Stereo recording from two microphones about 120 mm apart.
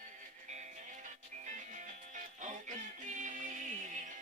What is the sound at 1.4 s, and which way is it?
Music, 90° right.